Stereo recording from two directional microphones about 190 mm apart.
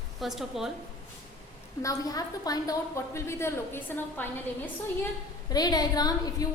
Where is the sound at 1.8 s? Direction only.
20° left (ahead or behind).